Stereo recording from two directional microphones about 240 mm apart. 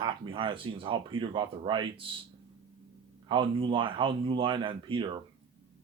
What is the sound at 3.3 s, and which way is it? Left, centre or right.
Speech, centre.